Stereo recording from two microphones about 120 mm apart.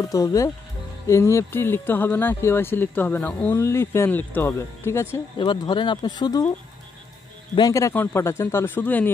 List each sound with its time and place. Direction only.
0.0 s speech: 30° left (ahead or behind)
5.4 s speech: 40° left (ahead or behind)
7.5 s speech: 30° left (ahead or behind)
7.9 s speech: 20° left (ahead or behind)